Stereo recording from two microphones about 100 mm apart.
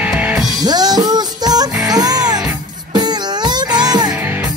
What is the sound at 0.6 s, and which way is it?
Music, 40° right (ahead or behind).